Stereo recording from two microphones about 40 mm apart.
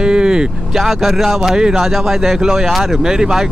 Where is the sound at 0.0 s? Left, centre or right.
Centre.